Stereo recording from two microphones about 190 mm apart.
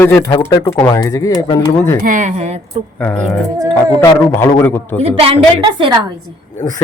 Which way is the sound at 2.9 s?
10° left (ahead or behind).